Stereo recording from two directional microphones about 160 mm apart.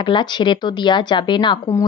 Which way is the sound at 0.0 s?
30° left (ahead or behind).